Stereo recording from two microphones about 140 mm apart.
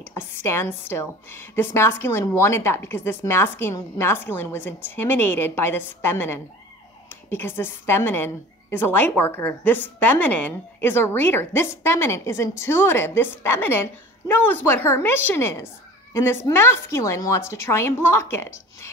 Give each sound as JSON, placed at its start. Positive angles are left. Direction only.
{"t": 0.1, "sound": "a woman's voice", "side_deg": 15}